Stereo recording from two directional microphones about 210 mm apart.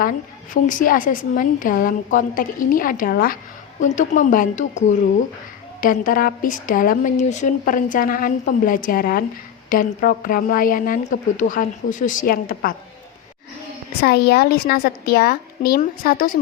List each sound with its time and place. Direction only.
0.5 s a woman's voice: 40° left (ahead or behind)
14.0 s a woman's voice: 50° left (ahead or behind)